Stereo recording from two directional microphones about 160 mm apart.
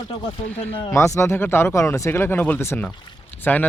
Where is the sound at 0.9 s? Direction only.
20° left (ahead or behind).